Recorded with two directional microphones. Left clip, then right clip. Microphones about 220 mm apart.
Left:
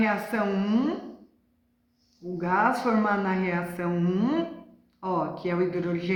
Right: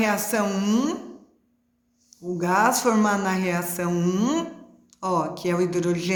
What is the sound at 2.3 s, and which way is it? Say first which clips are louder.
Speech: right 3 dB; 50° right (ahead or behind).